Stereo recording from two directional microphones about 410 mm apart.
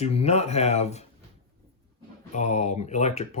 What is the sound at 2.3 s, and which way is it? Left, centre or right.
Speech, centre.